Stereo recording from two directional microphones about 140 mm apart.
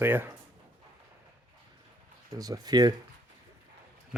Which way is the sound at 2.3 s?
25° right (ahead or behind).